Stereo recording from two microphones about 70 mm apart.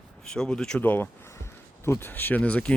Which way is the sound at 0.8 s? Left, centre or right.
Left.